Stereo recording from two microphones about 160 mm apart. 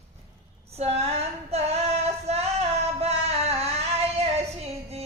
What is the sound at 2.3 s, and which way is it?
Music, 40° right (ahead or behind).